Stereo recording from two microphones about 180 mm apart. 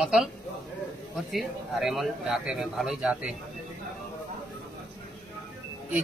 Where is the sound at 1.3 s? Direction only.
Centre (ahead or behind).